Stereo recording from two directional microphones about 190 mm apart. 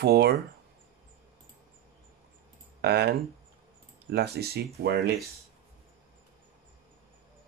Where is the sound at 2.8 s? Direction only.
60° right (ahead or behind).